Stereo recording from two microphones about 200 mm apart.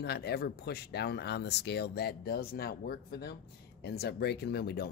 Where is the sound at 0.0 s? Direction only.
55° left (ahead or behind).